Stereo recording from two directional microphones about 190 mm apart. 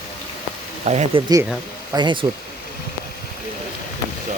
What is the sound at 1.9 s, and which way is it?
Speech, 25° right (ahead or behind).